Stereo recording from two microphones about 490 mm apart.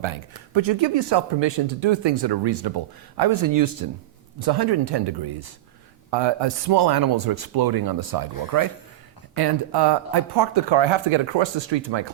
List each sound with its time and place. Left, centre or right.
0.0 s speech: right